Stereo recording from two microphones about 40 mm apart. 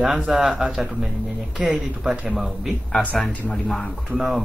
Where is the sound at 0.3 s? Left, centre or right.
Centre.